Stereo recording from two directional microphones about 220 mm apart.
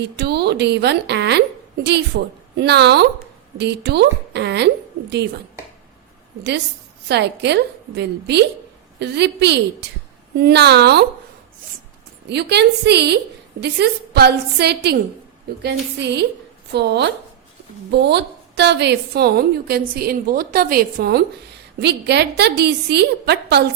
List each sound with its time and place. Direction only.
0.0 s a woman's voice: 50° right (ahead or behind)
7.1 s a woman's voice: 50° right (ahead or behind)
12.3 s a woman's voice: 50° right (ahead or behind)